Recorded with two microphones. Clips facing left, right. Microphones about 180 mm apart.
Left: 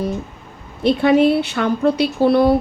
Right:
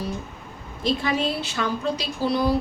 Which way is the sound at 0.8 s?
65° left (ahead or behind).